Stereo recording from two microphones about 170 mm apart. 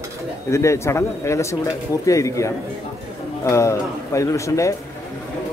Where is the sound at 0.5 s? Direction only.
15° left (ahead or behind).